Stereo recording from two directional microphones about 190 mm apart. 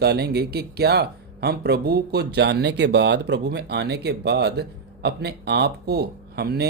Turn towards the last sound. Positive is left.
turn(degrees=-55)  # may be behind; listen again after turning